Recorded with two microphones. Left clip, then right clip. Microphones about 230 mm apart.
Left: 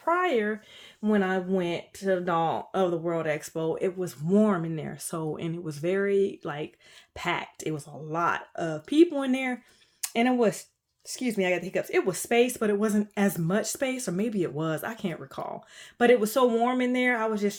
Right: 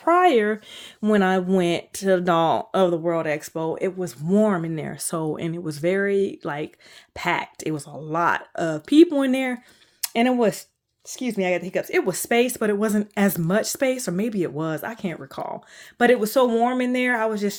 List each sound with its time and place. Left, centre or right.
0.0 s speech: right